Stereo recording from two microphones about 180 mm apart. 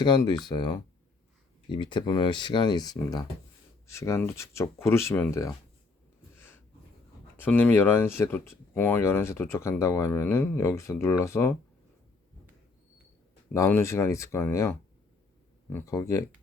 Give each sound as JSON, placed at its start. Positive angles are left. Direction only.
{"t": 0.0, "sound": "speech", "side_deg": 25}
{"t": 6.3, "sound": "snort", "side_deg": 10}
{"t": 7.3, "sound": "speech", "side_deg": 10}
{"t": 13.5, "sound": "speech", "side_deg": 15}